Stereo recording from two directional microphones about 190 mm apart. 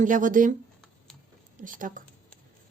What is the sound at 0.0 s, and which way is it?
Speech, 45° right (ahead or behind).